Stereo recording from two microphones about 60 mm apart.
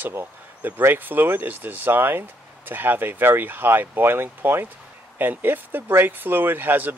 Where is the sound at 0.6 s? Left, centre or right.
Right.